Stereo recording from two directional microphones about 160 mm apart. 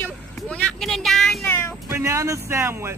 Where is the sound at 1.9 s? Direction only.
15° right (ahead or behind).